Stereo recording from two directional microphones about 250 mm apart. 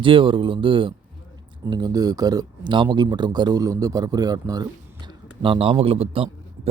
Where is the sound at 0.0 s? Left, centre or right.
Centre.